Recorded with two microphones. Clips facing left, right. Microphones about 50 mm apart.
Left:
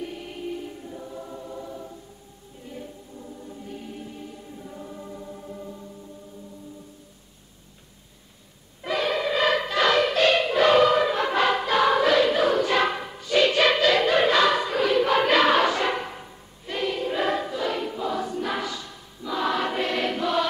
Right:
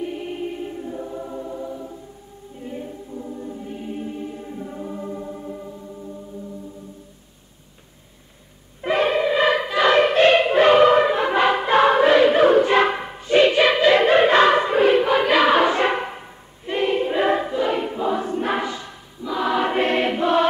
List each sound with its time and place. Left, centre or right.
0.0 s music: right
2.6 s choir: right
8.8 s music: right
9.2 s choir: centre
9.8 s choir: right
11.1 s choir: right
13.6 s music: centre
13.8 s choir: right
15.0 s choir: centre
15.6 s a sound: right
16.6 s choir: right
19.2 s choir: centre
19.6 s choir: right